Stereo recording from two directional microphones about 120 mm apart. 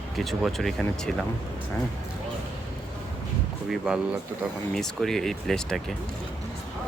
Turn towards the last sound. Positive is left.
turn(degrees=5)  # may be behind; listen again after turning